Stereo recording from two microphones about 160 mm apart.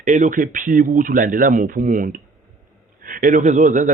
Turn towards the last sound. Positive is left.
turn(degrees=-55)  # may be behind; listen again after turning